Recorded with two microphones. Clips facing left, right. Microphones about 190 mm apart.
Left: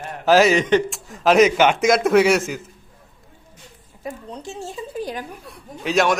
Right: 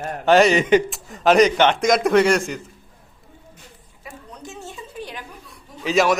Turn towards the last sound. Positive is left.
turn(degrees=0)  # may be behind; listen again after turning